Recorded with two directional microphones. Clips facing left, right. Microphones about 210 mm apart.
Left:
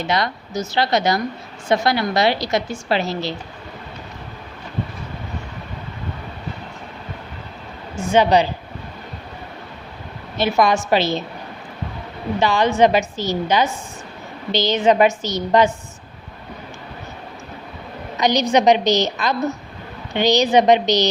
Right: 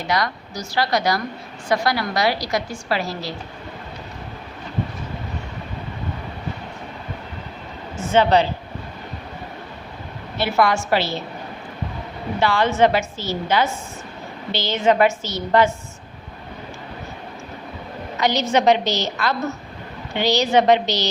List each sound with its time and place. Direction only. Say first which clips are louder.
0.1 s a woman's voice: right 1 dB; 25° left (ahead or behind)
8.1 s a woman's voice: left 1 dB; 15° left (ahead or behind)
10.3 s a woman's voice: left 2 dB; 20° left (ahead or behind)
12.4 s a woman's voice: left 2 dB; 15° left (ahead or behind)
18.2 s a woman's voice: left 3 dB; 15° left (ahead or behind)